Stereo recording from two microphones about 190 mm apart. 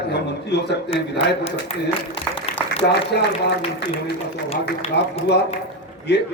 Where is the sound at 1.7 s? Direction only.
30° left (ahead or behind).